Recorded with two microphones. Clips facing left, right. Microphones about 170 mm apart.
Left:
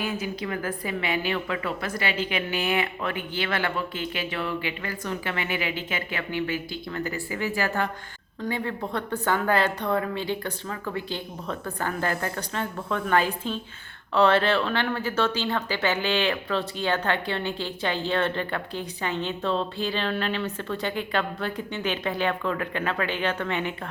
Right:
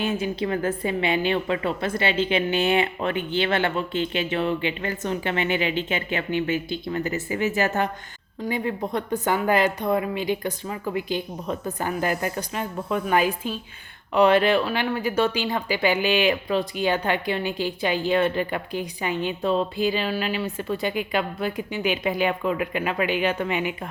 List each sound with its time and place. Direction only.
0.0 s a woman's voice: 25° right (ahead or behind)